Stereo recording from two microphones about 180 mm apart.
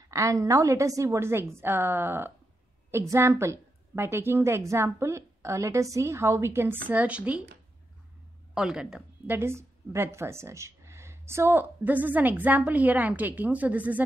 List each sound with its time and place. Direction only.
0.0 s a woman's voice: 20° right (ahead or behind)
8.5 s a woman's voice: 5° right (ahead or behind)